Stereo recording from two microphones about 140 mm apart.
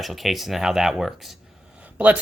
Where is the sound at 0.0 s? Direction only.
Centre (ahead or behind).